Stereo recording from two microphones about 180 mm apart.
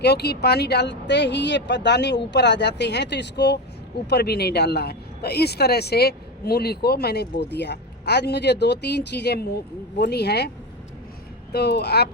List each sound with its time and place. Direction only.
0.0 s speech: 65° left (ahead or behind)
11.5 s speech: 65° left (ahead or behind)